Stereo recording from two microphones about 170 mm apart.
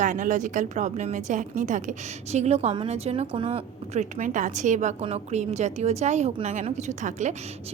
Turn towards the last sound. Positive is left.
turn(degrees=-45)  # may be behind; listen again after turning